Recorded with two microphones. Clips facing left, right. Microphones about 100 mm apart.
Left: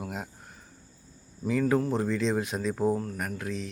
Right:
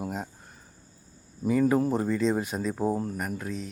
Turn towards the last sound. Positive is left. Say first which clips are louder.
# even
turn(degrees=0)  # may be behind; listen again after turning